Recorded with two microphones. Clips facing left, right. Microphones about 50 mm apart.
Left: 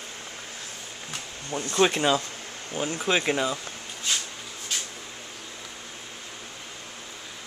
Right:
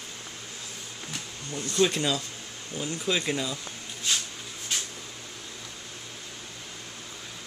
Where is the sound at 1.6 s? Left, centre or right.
Left.